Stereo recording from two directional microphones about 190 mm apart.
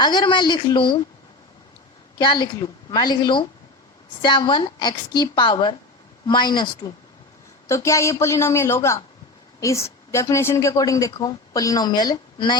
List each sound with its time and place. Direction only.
0.0 s a woman's voice: 20° left (ahead or behind)
2.1 s a woman's voice: 25° left (ahead or behind)
7.7 s a woman's voice: 15° left (ahead or behind)